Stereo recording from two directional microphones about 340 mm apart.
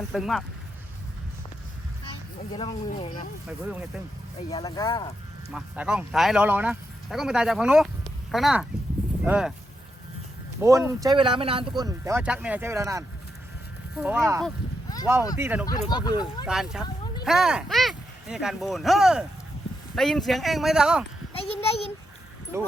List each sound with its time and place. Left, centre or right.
0.1 s speech: centre
2.6 s speech: centre
4.4 s speech: centre
5.5 s speech: centre
10.6 s speech: centre
15.6 s speech: centre
16.5 s speech: centre
16.8 s a sound: centre
17.2 s speech: centre
21.3 s a child's voice: centre
22.5 s speech: centre